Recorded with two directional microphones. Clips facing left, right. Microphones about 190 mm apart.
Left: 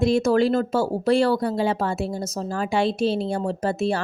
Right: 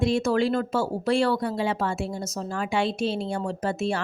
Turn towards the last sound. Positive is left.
turn(degrees=35)  # may be behind; listen again after turning